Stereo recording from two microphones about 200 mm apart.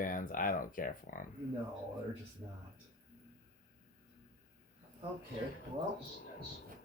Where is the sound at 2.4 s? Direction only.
25° right (ahead or behind).